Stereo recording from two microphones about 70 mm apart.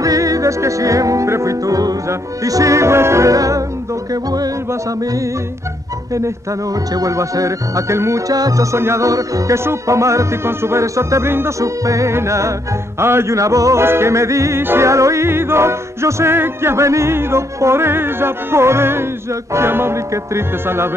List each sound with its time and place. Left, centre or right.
0.0 s music: right
4.1 s music: right
7.0 s music: right
8.3 s music: right
8.7 s music: right
11.6 s music: right
14.6 s music: right
14.9 s music: right